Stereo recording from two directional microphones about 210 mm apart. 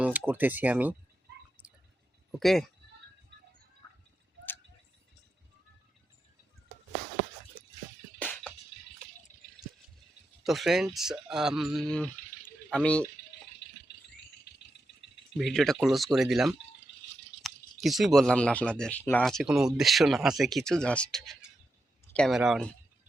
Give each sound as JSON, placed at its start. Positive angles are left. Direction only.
{"t": 0.3, "sound": "speech", "side_deg": -10}
{"t": 1.6, "sound": "a sound", "side_deg": -5}
{"t": 2.4, "sound": "speech", "side_deg": 0}
{"t": 8.2, "sound": "drip", "side_deg": 5}
{"t": 10.4, "sound": "speech", "side_deg": 0}
{"t": 13.6, "sound": "a sound", "side_deg": 55}
{"t": 14.4, "sound": "rattle", "side_deg": 55}
{"t": 15.4, "sound": "speech", "side_deg": 0}